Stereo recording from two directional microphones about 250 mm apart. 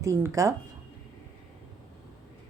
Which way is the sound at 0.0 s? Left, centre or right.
Centre.